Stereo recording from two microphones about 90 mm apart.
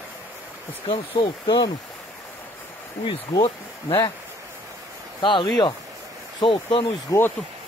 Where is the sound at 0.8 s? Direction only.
60° left (ahead or behind).